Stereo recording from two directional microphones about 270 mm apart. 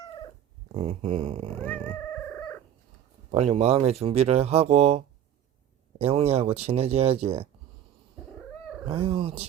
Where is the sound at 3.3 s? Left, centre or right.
Right.